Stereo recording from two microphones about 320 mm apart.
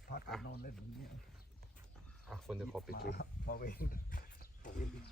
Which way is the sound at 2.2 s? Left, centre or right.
Centre.